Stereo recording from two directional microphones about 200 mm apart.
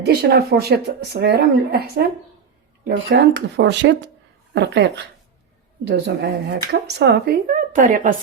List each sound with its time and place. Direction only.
0.0 s speech: 55° right (ahead or behind)
5.9 s speech: 60° right (ahead or behind); by 8.1 s 40° right (ahead or behind)